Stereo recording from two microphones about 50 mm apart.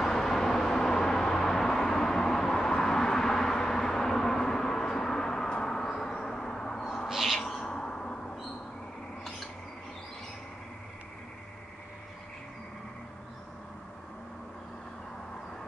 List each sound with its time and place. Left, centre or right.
0.0 s vehicle: centre
5.9 s a sound: centre
7.1 s owl: centre
7.6 s bird: centre